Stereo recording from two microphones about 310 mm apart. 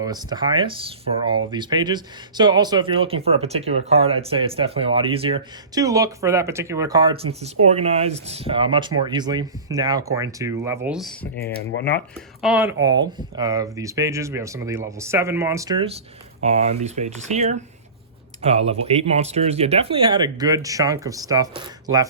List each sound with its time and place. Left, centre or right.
0.0 s speech: centre
11.3 s speech: left
11.9 s speech: centre